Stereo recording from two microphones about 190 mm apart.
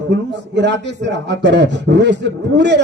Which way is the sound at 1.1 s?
65° right (ahead or behind).